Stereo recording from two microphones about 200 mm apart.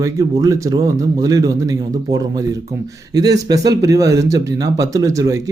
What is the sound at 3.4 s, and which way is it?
Speech, 20° right (ahead or behind).